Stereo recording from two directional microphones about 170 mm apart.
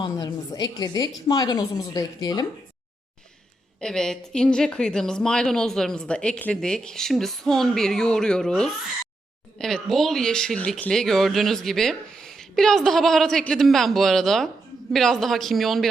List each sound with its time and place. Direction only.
0.0 s a woman's voice: 25° left (ahead or behind)
3.8 s speech: 5° left (ahead or behind)